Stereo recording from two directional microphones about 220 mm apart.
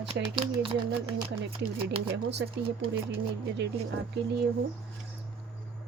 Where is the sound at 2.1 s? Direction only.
50° right (ahead or behind).